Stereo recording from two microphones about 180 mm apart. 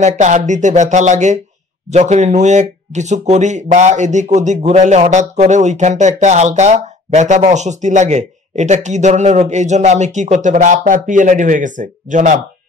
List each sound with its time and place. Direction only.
0.0 s speech: 40° right (ahead or behind)